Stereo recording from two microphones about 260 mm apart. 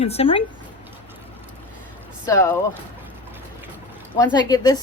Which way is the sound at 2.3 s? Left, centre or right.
Centre.